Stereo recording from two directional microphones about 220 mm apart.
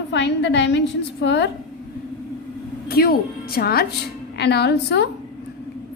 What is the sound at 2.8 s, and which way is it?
A woman's voice, 45° left (ahead or behind).